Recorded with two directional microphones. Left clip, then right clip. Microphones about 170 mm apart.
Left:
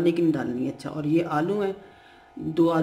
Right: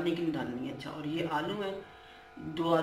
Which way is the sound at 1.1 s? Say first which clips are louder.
Left 9 dB; 90° left.